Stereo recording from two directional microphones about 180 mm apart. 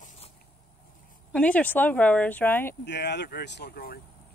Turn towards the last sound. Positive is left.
turn(degrees=60)  # may be behind; listen again after turning